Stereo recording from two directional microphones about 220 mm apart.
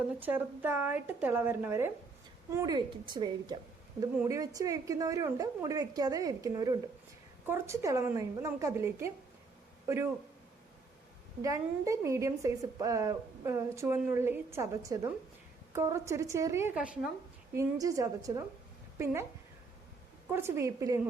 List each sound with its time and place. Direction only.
0.2 s a woman's voice: 10° right (ahead or behind)
11.4 s a woman's voice: 15° right (ahead or behind)
20.3 s a woman's voice: 10° right (ahead or behind)